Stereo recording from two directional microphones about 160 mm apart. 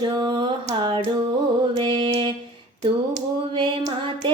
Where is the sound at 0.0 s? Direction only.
25° right (ahead or behind).